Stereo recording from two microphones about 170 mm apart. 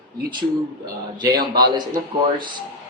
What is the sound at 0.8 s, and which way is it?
Speech, 25° right (ahead or behind).